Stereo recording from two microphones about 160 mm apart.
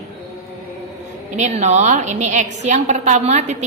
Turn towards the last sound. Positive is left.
turn(degrees=-45)  # may be behind; listen again after turning